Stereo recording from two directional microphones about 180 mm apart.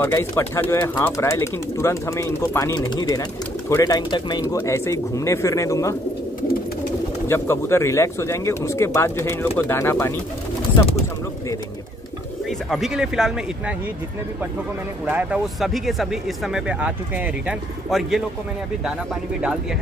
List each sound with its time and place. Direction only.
0.0 s speech: 15° left (ahead or behind)
7.2 s speech: 15° left (ahead or behind)
12.4 s speech: centre (ahead or behind)
15.0 s speech: 10° right (ahead or behind)